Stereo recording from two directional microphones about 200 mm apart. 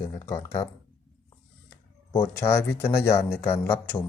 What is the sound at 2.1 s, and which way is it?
Speech, 10° left (ahead or behind).